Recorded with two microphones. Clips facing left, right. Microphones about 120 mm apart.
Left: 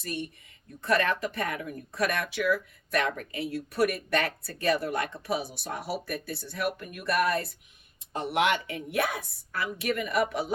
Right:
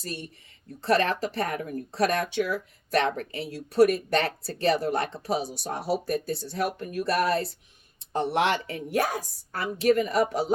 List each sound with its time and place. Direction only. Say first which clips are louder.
0.0 s a woman's voice: left 2 dB; 30° right (ahead or behind)